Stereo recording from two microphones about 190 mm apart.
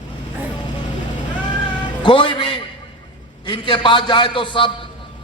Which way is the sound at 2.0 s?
25° left (ahead or behind).